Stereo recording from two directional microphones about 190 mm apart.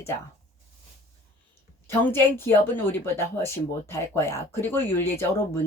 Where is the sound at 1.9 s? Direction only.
10° left (ahead or behind).